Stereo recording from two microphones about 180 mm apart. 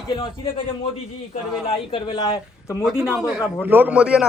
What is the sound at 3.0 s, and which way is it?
A man's voice, 5° right (ahead or behind).